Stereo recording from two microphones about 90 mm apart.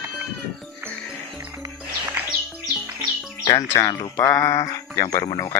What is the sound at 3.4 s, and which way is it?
Music, 50° left (ahead or behind).